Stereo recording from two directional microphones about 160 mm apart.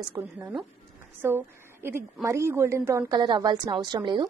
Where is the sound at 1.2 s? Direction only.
15° right (ahead or behind).